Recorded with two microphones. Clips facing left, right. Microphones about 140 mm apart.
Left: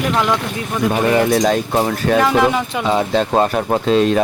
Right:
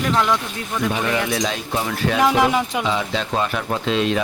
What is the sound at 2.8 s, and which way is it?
Speech, 45° left (ahead or behind).